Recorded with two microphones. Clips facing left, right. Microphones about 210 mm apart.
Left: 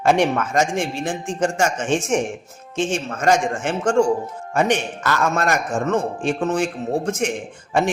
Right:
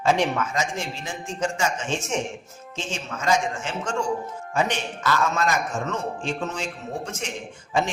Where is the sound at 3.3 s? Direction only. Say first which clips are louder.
Left 5 dB; 50° left (ahead or behind).